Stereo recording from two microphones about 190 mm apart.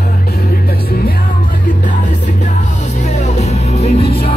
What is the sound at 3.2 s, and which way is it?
Music, 35° left (ahead or behind).